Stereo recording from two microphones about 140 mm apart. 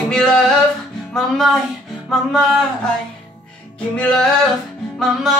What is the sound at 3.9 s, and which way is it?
Music, 5° left (ahead or behind).